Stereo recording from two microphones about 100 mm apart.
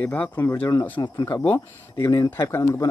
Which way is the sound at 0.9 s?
50° left (ahead or behind).